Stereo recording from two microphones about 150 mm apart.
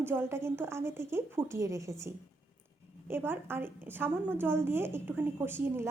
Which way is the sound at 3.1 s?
15° right (ahead or behind).